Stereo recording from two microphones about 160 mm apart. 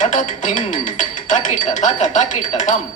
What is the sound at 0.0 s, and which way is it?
Speech, 50° left (ahead or behind).